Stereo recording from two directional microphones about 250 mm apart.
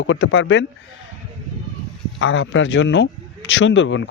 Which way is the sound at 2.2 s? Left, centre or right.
Left.